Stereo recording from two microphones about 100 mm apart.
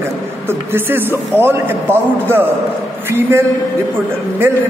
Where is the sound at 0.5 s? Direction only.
20° right (ahead or behind).